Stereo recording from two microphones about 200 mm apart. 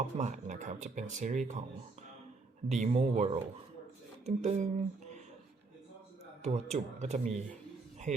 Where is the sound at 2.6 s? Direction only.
35° right (ahead or behind).